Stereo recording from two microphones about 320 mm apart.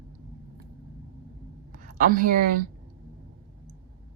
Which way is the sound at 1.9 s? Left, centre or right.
Right.